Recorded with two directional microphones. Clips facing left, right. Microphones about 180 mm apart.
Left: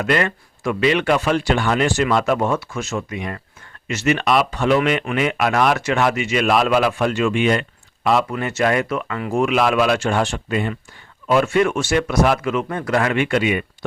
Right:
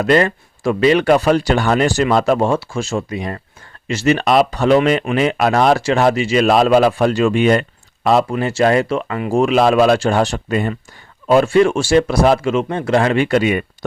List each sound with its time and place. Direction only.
0.0 s speech: 35° right (ahead or behind)
11.3 s speech: 30° right (ahead or behind)